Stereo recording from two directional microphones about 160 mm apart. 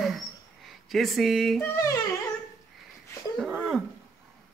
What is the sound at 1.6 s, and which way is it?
Yodeling, 20° left (ahead or behind).